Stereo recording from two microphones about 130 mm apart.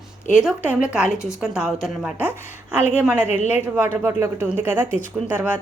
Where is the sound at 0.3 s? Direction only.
5° right (ahead or behind).